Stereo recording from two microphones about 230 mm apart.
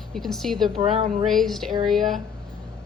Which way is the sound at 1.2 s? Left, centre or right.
Centre.